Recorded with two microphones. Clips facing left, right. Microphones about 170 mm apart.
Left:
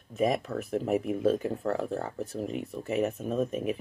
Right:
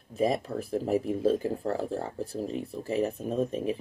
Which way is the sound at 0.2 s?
30° right (ahead or behind).